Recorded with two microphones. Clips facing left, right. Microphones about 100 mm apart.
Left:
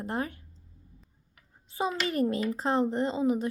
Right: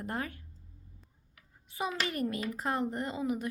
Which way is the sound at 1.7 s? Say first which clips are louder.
Left 5 dB; 30° left (ahead or behind).